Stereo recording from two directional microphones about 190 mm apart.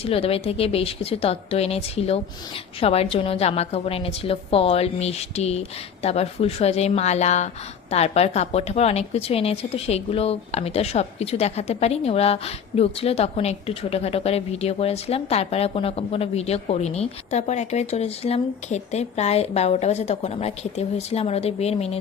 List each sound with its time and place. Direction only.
0.0 s a woman's voice: 30° left (ahead or behind)